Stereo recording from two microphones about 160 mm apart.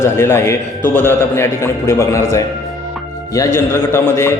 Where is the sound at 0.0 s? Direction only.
15° left (ahead or behind).